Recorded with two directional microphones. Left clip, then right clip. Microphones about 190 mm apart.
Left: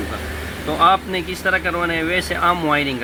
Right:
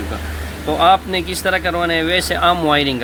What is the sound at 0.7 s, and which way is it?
Speech, 30° right (ahead or behind).